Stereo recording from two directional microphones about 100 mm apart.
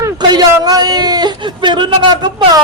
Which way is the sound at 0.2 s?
40° right (ahead or behind).